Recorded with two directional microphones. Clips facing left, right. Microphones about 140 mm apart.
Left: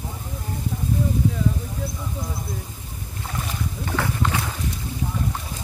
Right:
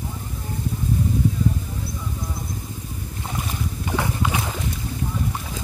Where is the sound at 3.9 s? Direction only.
15° right (ahead or behind).